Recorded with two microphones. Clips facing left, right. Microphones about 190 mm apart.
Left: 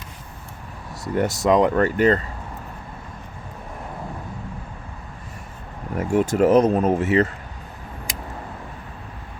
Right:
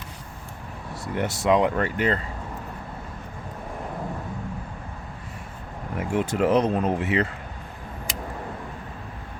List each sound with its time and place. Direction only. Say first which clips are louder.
1.0 s speech: left 4 dB; 40° left (ahead or behind)
6.0 s speech: left 5 dB; 45° left (ahead or behind)